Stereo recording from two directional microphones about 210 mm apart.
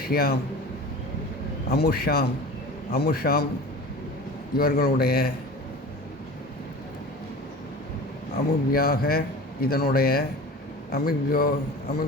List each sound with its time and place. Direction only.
0.0 s a man's voice: 45° left (ahead or behind)
1.7 s speech: 45° left (ahead or behind)
4.5 s speech: 45° left (ahead or behind)
8.7 s speech: 45° left (ahead or behind)